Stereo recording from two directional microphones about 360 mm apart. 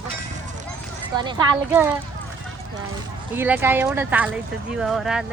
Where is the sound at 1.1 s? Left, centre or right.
Centre.